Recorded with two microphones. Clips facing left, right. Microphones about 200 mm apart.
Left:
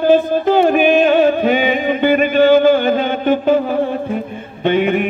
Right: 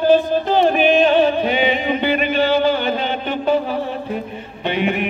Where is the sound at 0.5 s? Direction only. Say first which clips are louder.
Left 3 dB; 45° left (ahead or behind).